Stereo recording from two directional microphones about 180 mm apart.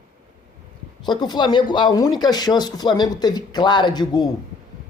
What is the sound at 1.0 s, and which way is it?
Speech, 25° left (ahead or behind).